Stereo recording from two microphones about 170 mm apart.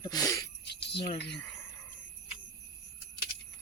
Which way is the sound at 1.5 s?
15° left (ahead or behind).